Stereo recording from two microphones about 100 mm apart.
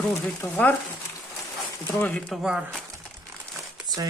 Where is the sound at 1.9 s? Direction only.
20° left (ahead or behind).